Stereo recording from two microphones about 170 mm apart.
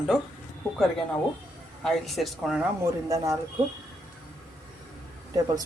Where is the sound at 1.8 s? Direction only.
Centre (ahead or behind).